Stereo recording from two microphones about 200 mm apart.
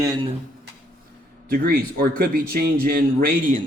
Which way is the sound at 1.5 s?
45° right (ahead or behind).